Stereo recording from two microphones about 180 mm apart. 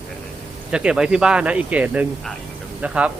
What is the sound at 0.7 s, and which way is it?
Speech, 5° right (ahead or behind).